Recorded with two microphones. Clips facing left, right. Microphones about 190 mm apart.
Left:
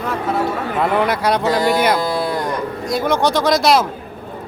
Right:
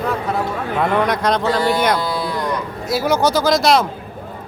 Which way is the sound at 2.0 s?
50° left (ahead or behind).